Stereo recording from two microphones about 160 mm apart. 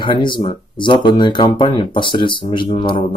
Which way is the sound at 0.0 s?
30° left (ahead or behind).